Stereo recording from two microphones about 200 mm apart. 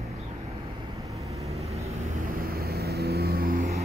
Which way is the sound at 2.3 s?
50° right (ahead or behind).